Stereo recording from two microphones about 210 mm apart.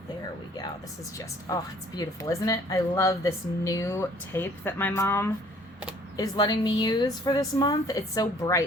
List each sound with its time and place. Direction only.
1.2 s a woman's voice: 15° left (ahead or behind)